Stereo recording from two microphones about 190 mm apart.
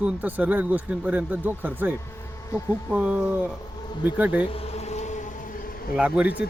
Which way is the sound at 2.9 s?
5° right (ahead or behind).